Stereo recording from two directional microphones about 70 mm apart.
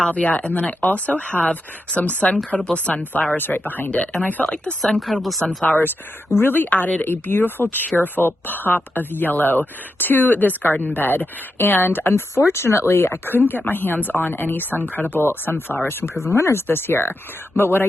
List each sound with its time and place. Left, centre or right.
0.0 s speech: centre
4.9 s speech: centre
5.6 s speech: left